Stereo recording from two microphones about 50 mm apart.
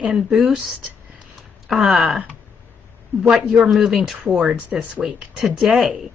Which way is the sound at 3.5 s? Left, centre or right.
Centre.